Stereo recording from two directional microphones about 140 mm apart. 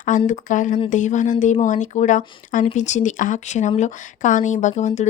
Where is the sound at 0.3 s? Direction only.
65° left (ahead or behind).